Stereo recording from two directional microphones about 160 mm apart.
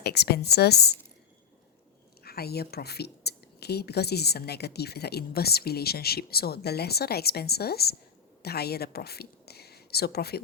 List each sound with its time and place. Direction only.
0.0 s a woman's voice: 90° left
2.2 s a woman's voice: 75° left (ahead or behind)